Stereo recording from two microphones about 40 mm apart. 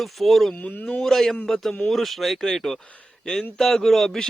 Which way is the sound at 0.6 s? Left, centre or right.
Left.